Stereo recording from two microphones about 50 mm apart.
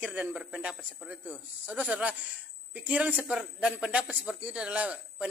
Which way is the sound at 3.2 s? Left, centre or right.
Centre.